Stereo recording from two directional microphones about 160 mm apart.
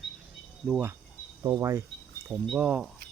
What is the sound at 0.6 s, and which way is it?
Speech, 10° right (ahead or behind).